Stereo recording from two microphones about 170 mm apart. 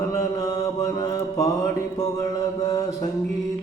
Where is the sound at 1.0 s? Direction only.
20° left (ahead or behind).